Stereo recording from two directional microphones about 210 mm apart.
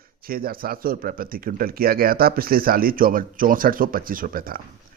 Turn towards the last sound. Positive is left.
turn(degrees=-45)  # may be behind; listen again after turning